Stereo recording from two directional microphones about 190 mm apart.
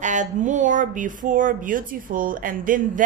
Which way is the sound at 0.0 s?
40° right (ahead or behind).